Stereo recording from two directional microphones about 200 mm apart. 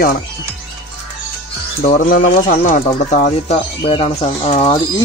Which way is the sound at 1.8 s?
45° left (ahead or behind).